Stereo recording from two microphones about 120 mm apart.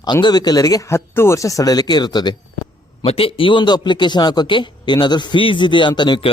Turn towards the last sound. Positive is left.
turn(degrees=40)  # may be behind; listen again after turning